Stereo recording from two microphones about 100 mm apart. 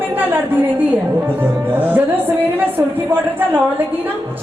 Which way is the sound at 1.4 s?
20° right (ahead or behind).